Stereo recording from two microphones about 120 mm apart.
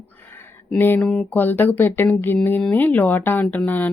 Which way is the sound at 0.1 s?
15° left (ahead or behind).